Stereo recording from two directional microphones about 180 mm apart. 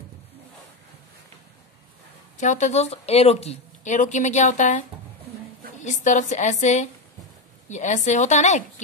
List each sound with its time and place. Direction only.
2.3 s speech: 40° left (ahead or behind)